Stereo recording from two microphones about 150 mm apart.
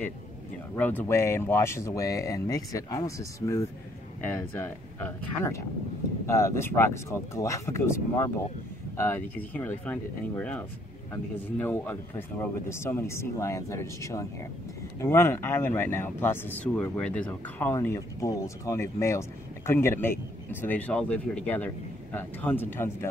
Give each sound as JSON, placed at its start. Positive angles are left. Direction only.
{"t": 0.7, "sound": "speech", "side_deg": 10}